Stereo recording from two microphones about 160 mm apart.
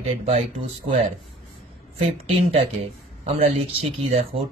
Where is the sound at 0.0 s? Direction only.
40° right (ahead or behind).